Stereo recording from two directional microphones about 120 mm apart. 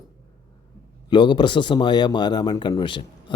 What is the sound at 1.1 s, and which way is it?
Speech, 40° left (ahead or behind).